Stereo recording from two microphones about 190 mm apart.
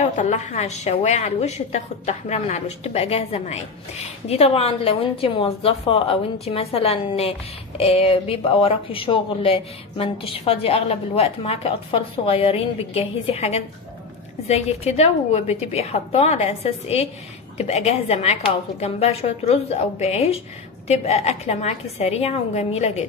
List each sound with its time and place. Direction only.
0.0 s a woman's voice: 40° left (ahead or behind)